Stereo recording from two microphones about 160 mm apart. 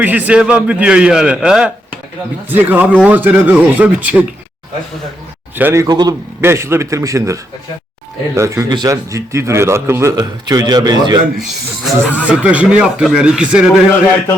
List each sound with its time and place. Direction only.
0.0 s speech: 10° right (ahead or behind)
5.5 s a man's voice: 15° right (ahead or behind)
8.4 s a man's voice: 20° right (ahead or behind)
12.1 s speech: 10° right (ahead or behind)